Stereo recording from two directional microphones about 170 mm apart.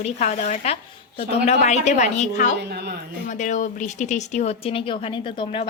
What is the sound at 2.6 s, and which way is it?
Speech, 70° right (ahead or behind).